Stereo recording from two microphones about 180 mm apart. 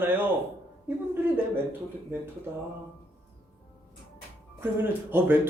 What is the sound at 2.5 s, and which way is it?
Speech, 10° right (ahead or behind).